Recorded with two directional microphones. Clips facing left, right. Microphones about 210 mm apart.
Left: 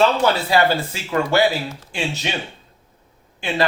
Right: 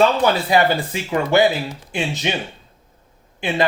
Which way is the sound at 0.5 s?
15° right (ahead or behind).